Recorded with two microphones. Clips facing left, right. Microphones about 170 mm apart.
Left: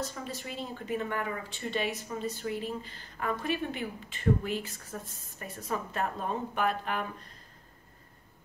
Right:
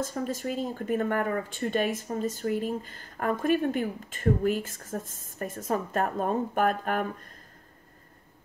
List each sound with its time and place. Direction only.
0.0 s speech: 45° right (ahead or behind)